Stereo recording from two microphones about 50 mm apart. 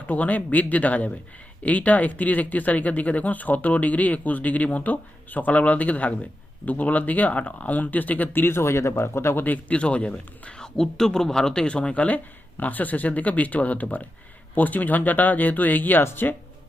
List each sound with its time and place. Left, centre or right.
0.1 s speech: left
9.4 s a man's voice: left
12.0 s speech: left